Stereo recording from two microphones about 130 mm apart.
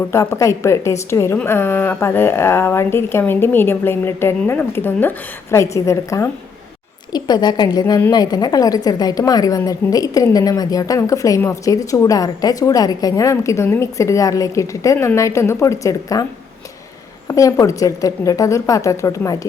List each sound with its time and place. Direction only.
0.1 s a woman's voice: 20° left (ahead or behind)
17.2 s a woman's voice: 25° left (ahead or behind)